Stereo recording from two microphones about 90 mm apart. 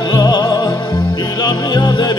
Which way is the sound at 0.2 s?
50° left (ahead or behind).